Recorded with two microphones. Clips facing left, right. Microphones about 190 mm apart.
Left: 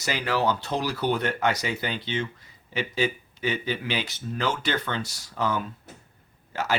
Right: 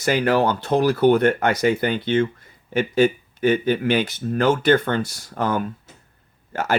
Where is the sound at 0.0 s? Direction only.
55° right (ahead or behind).